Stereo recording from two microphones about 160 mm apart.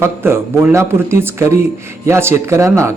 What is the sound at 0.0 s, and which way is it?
Speech, 15° right (ahead or behind).